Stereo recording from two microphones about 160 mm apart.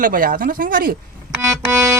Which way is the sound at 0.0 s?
60° right (ahead or behind).